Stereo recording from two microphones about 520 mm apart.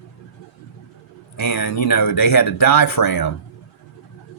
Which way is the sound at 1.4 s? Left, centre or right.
Left.